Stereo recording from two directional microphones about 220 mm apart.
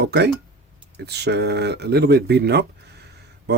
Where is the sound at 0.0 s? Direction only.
50° right (ahead or behind).